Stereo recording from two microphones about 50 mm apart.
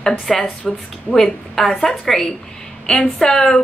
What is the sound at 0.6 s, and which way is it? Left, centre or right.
A woman's voice, centre.